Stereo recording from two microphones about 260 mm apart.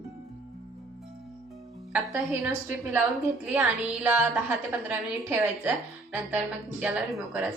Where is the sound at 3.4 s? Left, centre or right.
Centre.